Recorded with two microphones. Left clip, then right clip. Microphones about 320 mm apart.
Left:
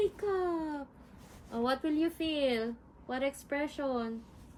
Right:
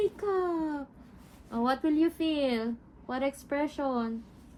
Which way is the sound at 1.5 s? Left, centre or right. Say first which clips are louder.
Right 4 dB; centre.